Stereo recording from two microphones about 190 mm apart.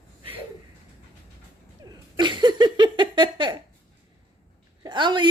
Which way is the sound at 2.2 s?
25° right (ahead or behind).